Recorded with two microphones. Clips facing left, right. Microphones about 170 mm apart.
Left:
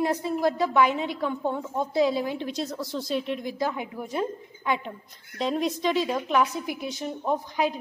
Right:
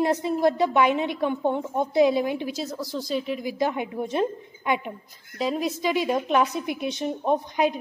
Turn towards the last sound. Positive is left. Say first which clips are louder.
# right 3 dB
turn(degrees=-20)  # may be behind; listen again after turning